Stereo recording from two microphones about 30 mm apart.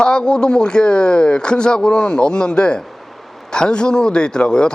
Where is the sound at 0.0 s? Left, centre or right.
Left.